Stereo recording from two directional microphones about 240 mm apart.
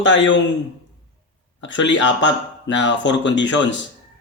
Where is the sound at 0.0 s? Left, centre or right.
Left.